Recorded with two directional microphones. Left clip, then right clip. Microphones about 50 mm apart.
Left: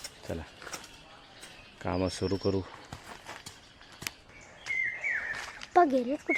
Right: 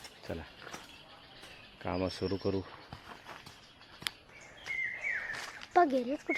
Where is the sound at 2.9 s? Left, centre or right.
Left.